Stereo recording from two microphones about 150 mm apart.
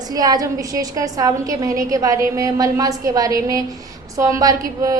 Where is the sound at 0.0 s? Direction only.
25° right (ahead or behind).